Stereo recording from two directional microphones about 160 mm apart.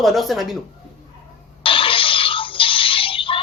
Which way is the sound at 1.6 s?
35° left (ahead or behind).